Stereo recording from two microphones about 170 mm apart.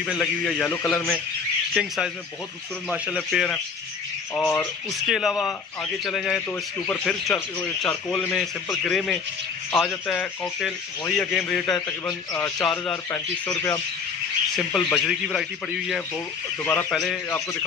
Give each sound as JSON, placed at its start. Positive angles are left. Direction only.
{"t": 0.2, "sound": "a man's voice", "side_deg": 10}
{"t": 3.2, "sound": "a man's voice", "side_deg": 5}
{"t": 4.4, "sound": "speech", "side_deg": 15}
{"t": 5.0, "sound": "a man's voice", "side_deg": 0}
{"t": 12.3, "sound": "speech", "side_deg": 20}
{"t": 14.7, "sound": "a man's voice", "side_deg": 0}